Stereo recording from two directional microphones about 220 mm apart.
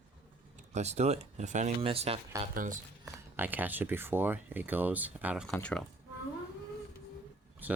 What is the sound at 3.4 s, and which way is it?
Speech, 10° right (ahead or behind).